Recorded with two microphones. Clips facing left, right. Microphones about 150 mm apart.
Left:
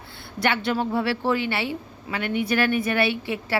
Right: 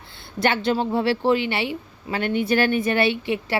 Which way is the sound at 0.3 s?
25° right (ahead or behind).